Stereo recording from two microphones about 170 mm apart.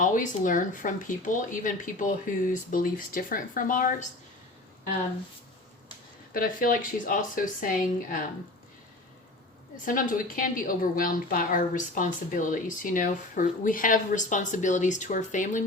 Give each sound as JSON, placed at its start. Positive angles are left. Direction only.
{"t": 0.0, "sound": "a woman's voice", "side_deg": 50}
{"t": 6.3, "sound": "a woman's voice", "side_deg": 55}
{"t": 9.8, "sound": "a woman's voice", "side_deg": 55}